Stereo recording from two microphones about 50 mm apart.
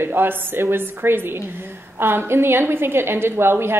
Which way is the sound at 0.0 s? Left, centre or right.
Right.